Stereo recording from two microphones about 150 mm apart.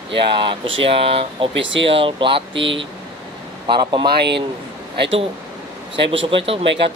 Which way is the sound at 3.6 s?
30° right (ahead or behind).